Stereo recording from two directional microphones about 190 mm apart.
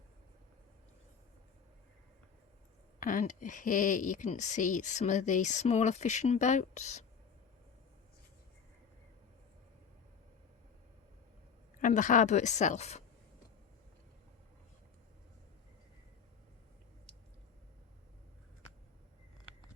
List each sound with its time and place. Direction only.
3.0 s speech: 45° left (ahead or behind)
11.8 s speech: 45° left (ahead or behind)